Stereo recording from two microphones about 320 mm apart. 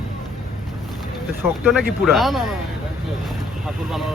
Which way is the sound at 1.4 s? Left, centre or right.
Centre.